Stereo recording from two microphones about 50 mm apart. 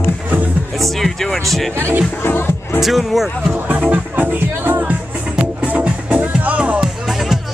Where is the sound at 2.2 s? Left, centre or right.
Left.